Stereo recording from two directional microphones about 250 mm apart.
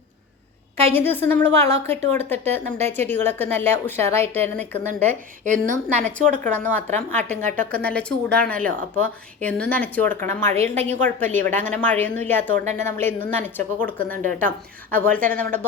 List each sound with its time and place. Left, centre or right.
0.9 s a woman's voice: centre
5.5 s a woman's voice: right
6.0 s a woman's voice: centre